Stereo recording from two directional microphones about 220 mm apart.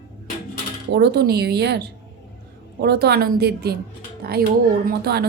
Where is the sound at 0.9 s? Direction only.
50° right (ahead or behind).